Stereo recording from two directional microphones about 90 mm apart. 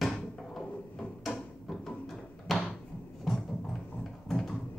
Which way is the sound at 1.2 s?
5° left (ahead or behind).